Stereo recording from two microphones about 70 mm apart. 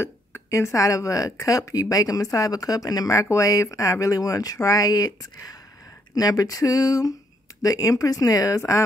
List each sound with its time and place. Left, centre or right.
0.0 s speech: left